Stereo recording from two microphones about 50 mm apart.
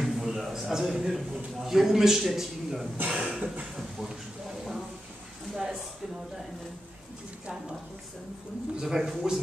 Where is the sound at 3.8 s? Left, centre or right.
Centre.